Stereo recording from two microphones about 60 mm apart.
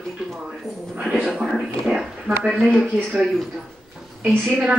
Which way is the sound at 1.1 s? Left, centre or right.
Centre.